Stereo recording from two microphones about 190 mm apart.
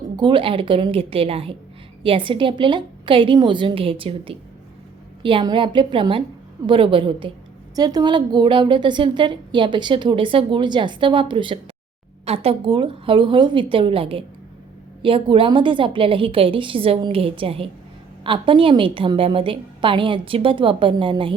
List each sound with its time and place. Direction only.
0.2 s a woman's voice: 25° right (ahead or behind)